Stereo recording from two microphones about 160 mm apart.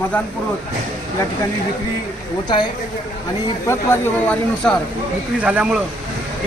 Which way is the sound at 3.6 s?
15° left (ahead or behind).